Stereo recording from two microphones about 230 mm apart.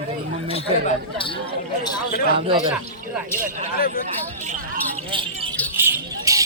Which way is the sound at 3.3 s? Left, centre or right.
Right.